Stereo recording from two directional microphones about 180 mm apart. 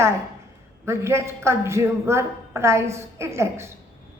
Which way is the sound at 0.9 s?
15° right (ahead or behind).